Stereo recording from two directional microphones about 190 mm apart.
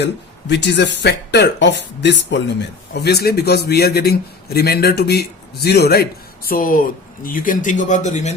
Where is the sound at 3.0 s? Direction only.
60° left (ahead or behind).